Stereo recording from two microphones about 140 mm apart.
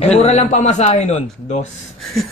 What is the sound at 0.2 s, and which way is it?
A man's voice, 50° left (ahead or behind).